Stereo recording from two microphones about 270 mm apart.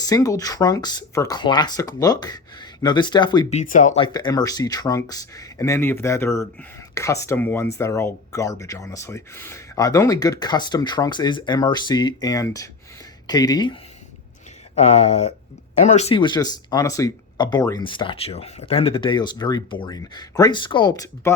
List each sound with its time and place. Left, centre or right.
0.0 s speech: centre
14.8 s speech: left